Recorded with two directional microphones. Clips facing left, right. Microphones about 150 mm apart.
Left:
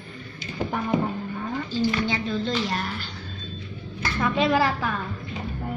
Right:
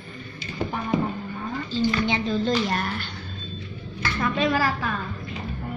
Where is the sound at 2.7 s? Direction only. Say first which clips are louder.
Right 2 dB; 50° right (ahead or behind).